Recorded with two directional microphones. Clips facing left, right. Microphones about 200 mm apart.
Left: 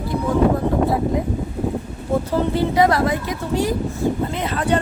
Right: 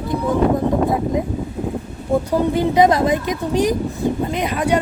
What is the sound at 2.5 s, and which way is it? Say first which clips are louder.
Speech: right 2 dB; 20° right (ahead or behind).